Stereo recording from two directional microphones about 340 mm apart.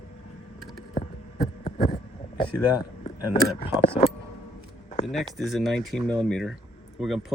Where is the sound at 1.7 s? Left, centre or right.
Left.